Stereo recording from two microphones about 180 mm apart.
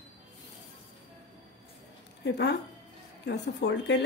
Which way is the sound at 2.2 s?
70° left (ahead or behind).